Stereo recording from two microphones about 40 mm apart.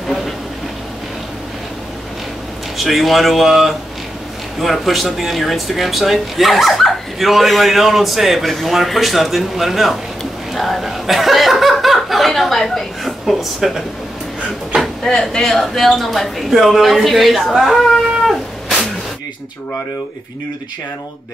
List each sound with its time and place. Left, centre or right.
2.8 s a man's voice: centre
13.2 s speech: centre
14.7 s speech: right
15.0 s speech: centre
15.5 s a man's voice: centre
18.2 s cat: centre